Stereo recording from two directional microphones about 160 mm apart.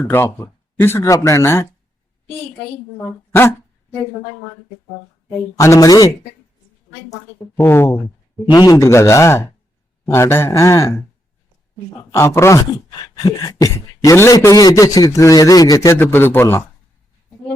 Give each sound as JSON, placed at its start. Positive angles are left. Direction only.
{"t": 0.1, "sound": "speech", "side_deg": 15}
{"t": 5.3, "sound": "speech", "side_deg": 20}
{"t": 7.6, "sound": "speech", "side_deg": 15}
{"t": 12.1, "sound": "speech", "side_deg": 15}